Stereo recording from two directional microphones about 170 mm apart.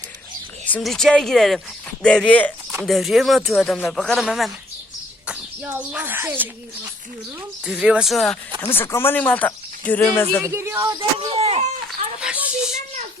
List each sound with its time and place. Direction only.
0.6 s a child's voice: 5° left (ahead or behind)
8.6 s speech: 15° left (ahead or behind)
10.5 s speech: 15° right (ahead or behind)
11.2 s speech: 35° right (ahead or behind)
11.9 s a sound: 5° right (ahead or behind)